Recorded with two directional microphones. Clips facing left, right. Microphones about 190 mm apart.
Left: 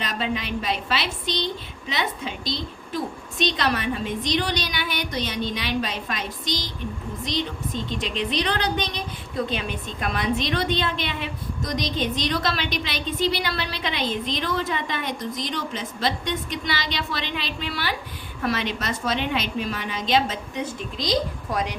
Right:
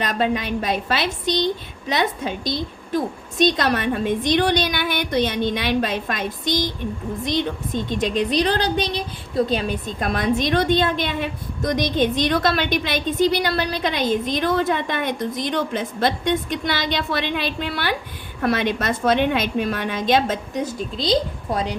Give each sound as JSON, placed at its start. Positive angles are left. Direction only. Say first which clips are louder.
{"t": 0.0, "sound": "a woman's voice", "louder": "right 6 dB", "side_deg": -50}
{"t": 3.4, "sound": "a woman's voice", "louder": "right 5 dB", "side_deg": -45}